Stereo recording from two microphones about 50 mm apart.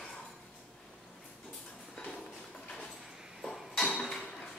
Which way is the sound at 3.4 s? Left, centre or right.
Centre.